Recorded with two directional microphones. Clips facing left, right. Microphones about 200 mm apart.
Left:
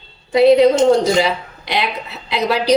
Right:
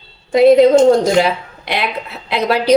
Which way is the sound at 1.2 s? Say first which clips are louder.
Right 2 dB; 55° right (ahead or behind).